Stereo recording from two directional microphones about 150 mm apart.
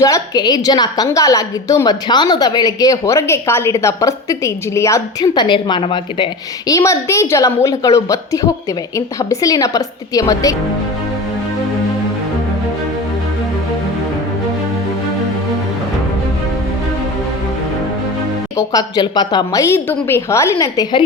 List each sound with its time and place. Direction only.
0.0 s a woman's voice: 25° left (ahead or behind)
6.7 s a woman's voice: 20° left (ahead or behind)
18.5 s a woman's voice: 25° left (ahead or behind)